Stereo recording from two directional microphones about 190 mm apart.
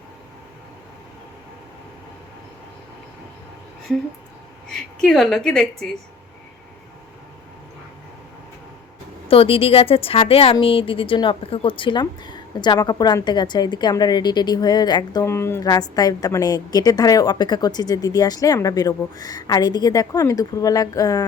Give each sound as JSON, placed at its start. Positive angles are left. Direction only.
{"t": 4.7, "sound": "a woman's voice", "side_deg": 5}
{"t": 9.3, "sound": "a woman's voice", "side_deg": 30}